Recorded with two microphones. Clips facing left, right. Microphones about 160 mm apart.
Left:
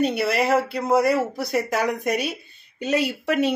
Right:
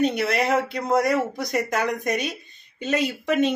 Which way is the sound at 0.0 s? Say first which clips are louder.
Left 1 dB; 5° left (ahead or behind).